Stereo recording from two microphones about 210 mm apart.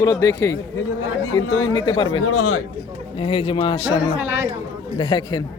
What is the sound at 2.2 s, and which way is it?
Speech, 90° left.